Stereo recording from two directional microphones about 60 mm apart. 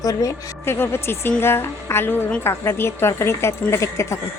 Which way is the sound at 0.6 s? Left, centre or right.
Left.